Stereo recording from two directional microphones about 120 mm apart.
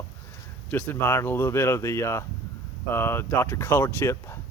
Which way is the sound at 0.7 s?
10° left (ahead or behind).